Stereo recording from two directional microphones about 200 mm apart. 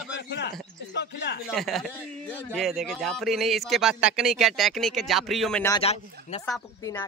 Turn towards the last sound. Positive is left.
turn(degrees=15)  # may be behind; listen again after turning